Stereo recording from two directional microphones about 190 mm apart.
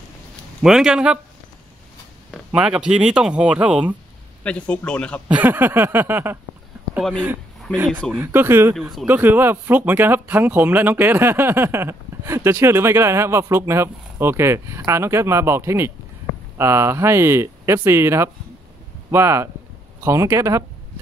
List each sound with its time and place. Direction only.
0.6 s speech: 5° right (ahead or behind)
2.3 s speech: 5° right (ahead or behind)
4.4 s speech: 5° left (ahead or behind)
5.3 s speech: 10° right (ahead or behind)